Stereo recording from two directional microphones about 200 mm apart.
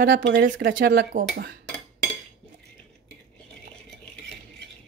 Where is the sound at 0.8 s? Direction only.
55° right (ahead or behind).